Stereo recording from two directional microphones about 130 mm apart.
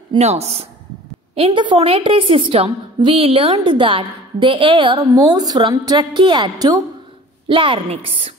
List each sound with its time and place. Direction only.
0.2 s a woman's voice: 55° right (ahead or behind)
5.1 s a woman's voice: 30° right (ahead or behind); by 8.3 s 45° right (ahead or behind)